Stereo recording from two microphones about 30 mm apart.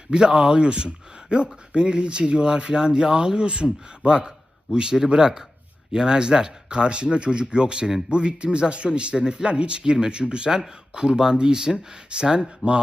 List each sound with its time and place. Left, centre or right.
0.1 s a man's voice: right